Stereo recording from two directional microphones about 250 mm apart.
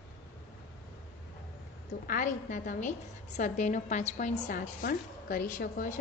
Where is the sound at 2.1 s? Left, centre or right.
Left.